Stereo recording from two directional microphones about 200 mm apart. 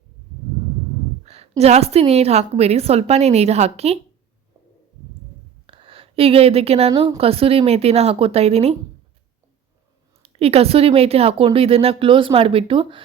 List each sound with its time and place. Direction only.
1.2 s a woman's voice: 30° right (ahead or behind)
5.6 s a woman's voice: 25° right (ahead or behind)
10.2 s a woman's voice: 30° right (ahead or behind)